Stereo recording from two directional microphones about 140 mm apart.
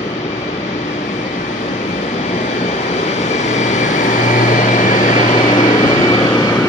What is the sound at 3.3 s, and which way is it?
Vehicle, 55° left (ahead or behind).